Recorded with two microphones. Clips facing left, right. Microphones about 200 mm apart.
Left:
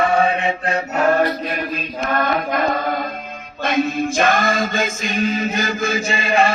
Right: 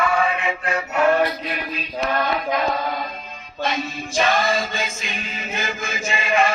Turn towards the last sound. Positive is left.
turn(degrees=35)  # may be behind; listen again after turning